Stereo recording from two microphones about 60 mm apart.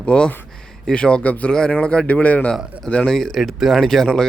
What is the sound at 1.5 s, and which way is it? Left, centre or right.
Speech, centre.